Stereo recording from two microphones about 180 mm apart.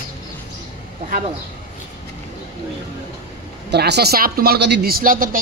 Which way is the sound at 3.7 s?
65° right (ahead or behind).